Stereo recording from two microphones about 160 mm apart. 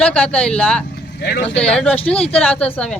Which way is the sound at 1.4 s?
5° left (ahead or behind).